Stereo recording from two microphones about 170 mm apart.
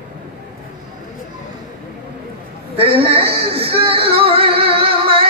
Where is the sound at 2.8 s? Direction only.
35° right (ahead or behind).